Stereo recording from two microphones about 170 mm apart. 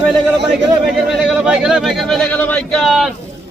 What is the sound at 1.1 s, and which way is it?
Speech, 5° right (ahead or behind).